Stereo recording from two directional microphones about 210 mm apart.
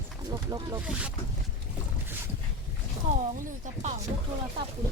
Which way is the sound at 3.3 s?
40° right (ahead or behind).